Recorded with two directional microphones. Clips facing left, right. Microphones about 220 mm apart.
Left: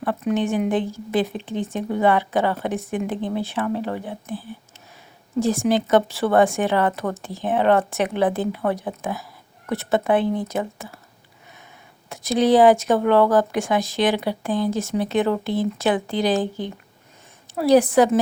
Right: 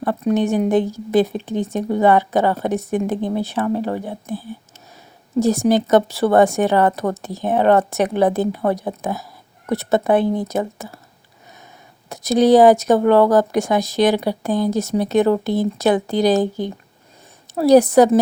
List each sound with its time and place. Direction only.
0.0 s speech: 40° right (ahead or behind)
12.0 s speech: 40° right (ahead or behind)